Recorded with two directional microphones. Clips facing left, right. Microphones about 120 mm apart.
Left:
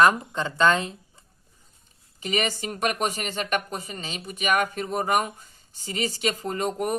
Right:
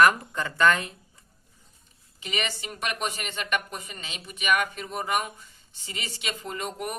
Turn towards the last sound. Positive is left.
turn(degrees=40)  # may be behind; listen again after turning